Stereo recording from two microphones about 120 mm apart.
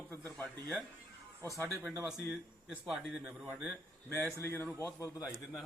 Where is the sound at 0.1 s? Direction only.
15° left (ahead or behind).